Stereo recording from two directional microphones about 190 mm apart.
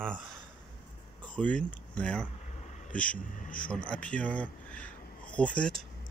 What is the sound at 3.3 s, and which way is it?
Speech, 45° left (ahead or behind).